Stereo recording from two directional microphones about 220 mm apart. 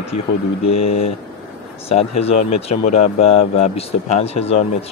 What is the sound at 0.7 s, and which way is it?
Speech, 25° left (ahead or behind).